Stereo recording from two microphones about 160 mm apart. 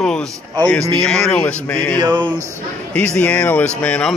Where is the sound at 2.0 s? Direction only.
30° right (ahead or behind).